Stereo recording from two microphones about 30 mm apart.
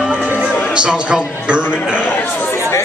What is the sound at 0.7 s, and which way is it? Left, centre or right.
Speech, right.